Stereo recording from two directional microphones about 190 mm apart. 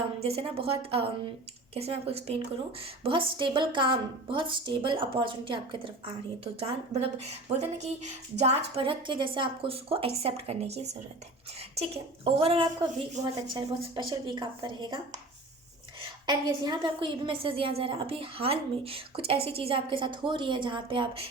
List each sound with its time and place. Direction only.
0.2 s a woman's voice: 30° right (ahead or behind)
16.0 s a woman's voice: 20° right (ahead or behind)